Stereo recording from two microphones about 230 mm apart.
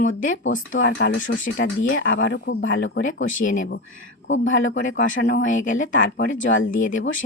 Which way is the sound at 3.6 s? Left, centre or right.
Left.